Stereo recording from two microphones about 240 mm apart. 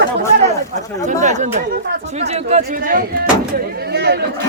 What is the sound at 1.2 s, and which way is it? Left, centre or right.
Speech, right.